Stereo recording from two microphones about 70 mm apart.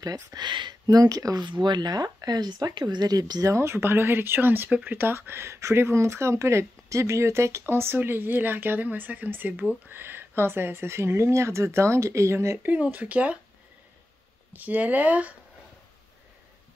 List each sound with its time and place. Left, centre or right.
0.3 s speech: right
3.5 s speech: right
12.6 s speech: right
14.5 s speech: right